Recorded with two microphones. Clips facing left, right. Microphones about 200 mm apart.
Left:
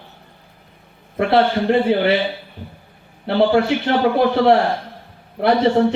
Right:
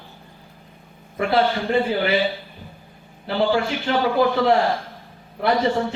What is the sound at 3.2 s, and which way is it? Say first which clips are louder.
A man's voice: left 5 dB; 65° left (ahead or behind).